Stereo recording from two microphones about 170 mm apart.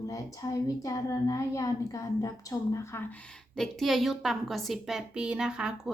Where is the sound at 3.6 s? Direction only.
Centre (ahead or behind).